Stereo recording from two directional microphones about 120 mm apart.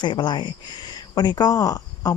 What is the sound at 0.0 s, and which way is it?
Speech, 40° left (ahead or behind).